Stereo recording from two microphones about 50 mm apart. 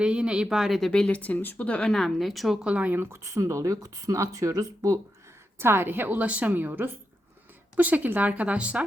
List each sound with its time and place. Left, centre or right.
0.0 s speech: centre
0.4 s speech: centre
0.8 s speech: centre
1.1 s speech: left
1.5 s speech: left
1.9 s speech: centre
2.6 s speech: right
3.1 s speech: right
5.5 s a woman's voice: right